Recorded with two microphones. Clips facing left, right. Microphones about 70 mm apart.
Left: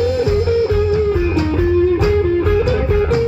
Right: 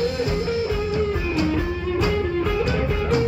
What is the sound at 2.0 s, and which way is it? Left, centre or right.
Music, left.